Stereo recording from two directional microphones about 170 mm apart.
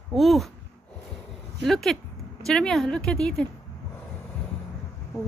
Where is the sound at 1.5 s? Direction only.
Centre (ahead or behind).